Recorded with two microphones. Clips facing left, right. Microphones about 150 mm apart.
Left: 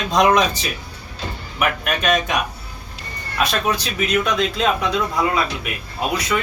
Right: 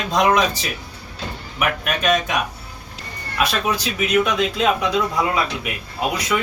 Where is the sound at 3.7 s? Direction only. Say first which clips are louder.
Right 2 dB; 10° right (ahead or behind).